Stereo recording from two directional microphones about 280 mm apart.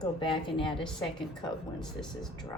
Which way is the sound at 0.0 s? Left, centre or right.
Centre.